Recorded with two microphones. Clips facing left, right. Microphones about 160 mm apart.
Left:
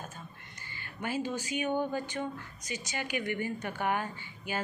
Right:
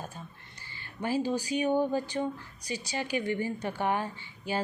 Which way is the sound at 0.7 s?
30° right (ahead or behind).